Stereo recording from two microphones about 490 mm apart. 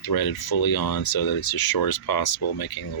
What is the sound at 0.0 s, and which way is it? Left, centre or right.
Speech, left.